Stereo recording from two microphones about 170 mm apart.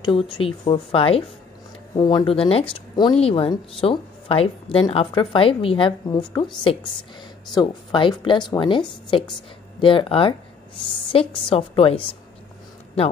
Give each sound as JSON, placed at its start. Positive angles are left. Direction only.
{"t": 0.0, "sound": "a woman's voice", "side_deg": 30}